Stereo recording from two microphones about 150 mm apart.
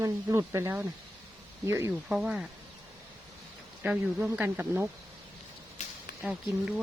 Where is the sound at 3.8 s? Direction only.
10° right (ahead or behind).